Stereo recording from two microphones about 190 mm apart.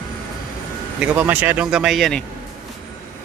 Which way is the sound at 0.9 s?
5° right (ahead or behind).